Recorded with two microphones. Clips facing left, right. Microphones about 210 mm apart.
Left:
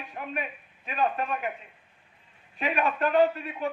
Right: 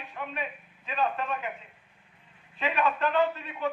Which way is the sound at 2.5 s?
40° left (ahead or behind).